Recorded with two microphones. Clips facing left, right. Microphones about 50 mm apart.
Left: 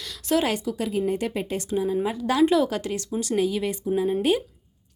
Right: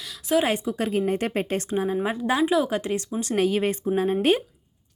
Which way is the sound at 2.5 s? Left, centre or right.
Centre.